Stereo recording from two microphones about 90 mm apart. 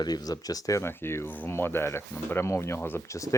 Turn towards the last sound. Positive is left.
turn(degrees=25)  # may be behind; listen again after turning